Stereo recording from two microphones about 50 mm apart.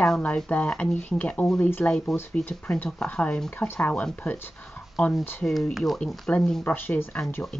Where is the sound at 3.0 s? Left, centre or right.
Left.